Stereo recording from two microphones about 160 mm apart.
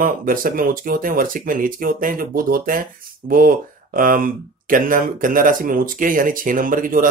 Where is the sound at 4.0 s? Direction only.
60° right (ahead or behind).